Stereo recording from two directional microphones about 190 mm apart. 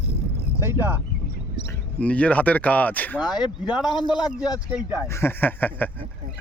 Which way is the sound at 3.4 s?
20° left (ahead or behind).